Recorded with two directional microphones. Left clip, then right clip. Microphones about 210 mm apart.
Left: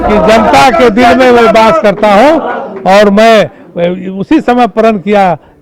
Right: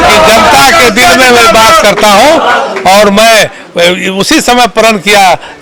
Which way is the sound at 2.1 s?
30° right (ahead or behind).